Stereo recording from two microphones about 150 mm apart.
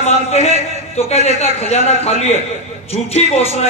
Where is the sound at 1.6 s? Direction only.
45° left (ahead or behind).